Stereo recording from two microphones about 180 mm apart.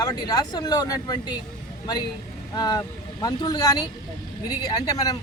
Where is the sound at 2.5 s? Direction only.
20° left (ahead or behind).